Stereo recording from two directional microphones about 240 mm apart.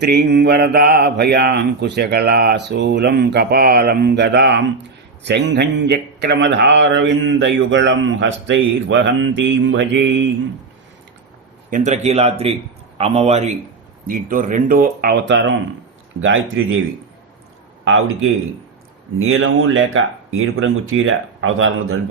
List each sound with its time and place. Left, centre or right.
0.0 s speech: right
11.7 s speech: right
17.8 s speech: right